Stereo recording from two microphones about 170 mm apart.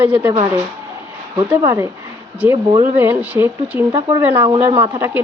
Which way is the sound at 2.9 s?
10° right (ahead or behind).